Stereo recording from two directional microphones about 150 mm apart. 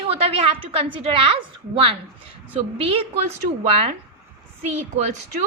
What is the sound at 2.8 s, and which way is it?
A woman's voice, 40° right (ahead or behind).